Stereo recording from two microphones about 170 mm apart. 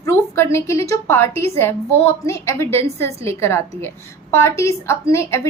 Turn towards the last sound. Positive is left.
turn(degrees=15)  # may be behind; listen again after turning